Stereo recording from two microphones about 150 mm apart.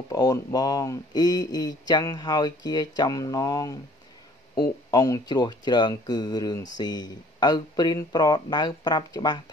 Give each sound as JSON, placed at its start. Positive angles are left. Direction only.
{"t": 0.1, "sound": "speech", "side_deg": 25}
{"t": 4.9, "sound": "speech", "side_deg": 25}